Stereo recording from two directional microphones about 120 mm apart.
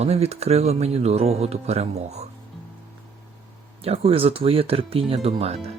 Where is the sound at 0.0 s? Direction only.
60° right (ahead or behind).